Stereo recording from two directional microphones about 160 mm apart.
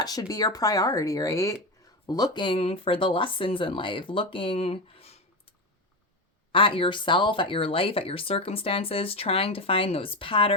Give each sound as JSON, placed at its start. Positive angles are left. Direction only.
{"t": 0.0, "sound": "speech", "side_deg": 25}
{"t": 6.5, "sound": "speech", "side_deg": 35}